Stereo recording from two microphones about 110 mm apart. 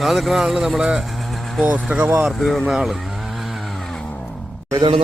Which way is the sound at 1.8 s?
10° right (ahead or behind).